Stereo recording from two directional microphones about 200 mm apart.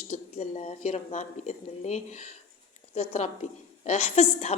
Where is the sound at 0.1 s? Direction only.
35° left (ahead or behind).